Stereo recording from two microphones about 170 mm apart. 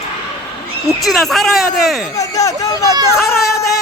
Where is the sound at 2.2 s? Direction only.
20° left (ahead or behind).